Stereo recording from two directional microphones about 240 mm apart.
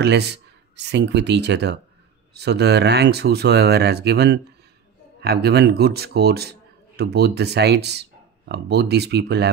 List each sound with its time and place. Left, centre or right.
0.0 s speech: right